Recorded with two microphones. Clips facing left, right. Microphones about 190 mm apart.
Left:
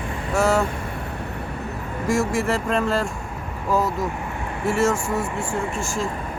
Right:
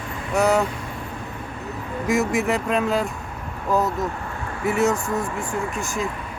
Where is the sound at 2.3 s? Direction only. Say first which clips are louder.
Right 1 dB; centre (ahead or behind).